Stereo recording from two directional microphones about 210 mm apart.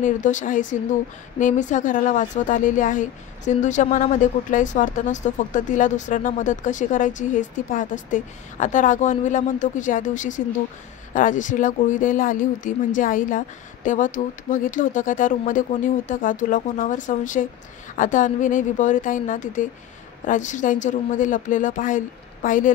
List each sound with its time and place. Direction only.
0.0 s speech: 35° left (ahead or behind)